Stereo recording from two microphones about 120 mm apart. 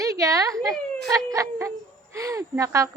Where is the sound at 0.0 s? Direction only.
30° right (ahead or behind).